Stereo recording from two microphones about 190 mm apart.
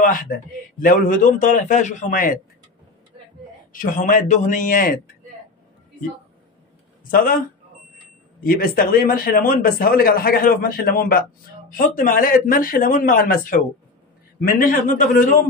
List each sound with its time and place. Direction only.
0.0 s a man's voice: 45° left (ahead or behind)
3.7 s a man's voice: 45° left (ahead or behind)
7.1 s a man's voice: 50° left (ahead or behind)
8.5 s a man's voice: 50° left (ahead or behind)
14.4 s a man's voice: 50° left (ahead or behind)